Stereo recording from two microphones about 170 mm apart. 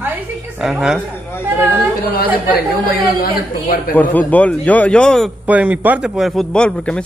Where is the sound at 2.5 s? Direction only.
60° left (ahead or behind).